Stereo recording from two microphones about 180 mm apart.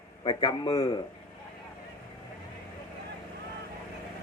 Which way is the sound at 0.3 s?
25° left (ahead or behind).